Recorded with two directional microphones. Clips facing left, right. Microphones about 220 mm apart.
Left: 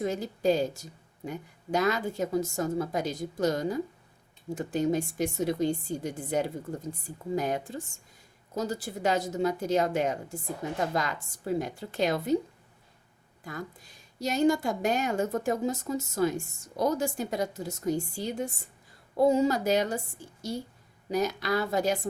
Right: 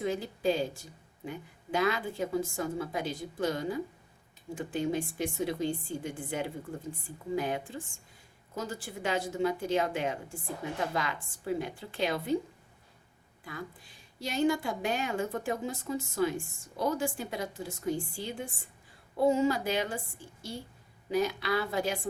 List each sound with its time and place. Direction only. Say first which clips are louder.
0.0 s a woman's voice: left 3 dB; 40° left (ahead or behind)
13.4 s a woman's voice: left 3 dB; 45° left (ahead or behind)
21.1 s a woman's voice: left 1 dB; 45° left (ahead or behind)